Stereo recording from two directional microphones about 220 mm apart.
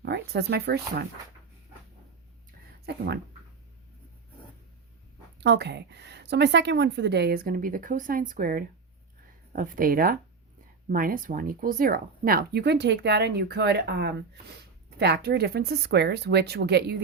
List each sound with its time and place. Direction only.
0.0 s speech: 50° right (ahead or behind)
2.8 s speech: 45° right (ahead or behind)
5.4 s speech: 50° right (ahead or behind)